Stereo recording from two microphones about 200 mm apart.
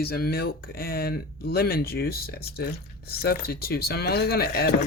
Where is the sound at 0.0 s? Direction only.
50° left (ahead or behind).